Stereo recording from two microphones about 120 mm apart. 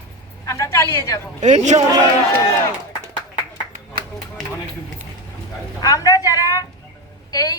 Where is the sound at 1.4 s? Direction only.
85° right.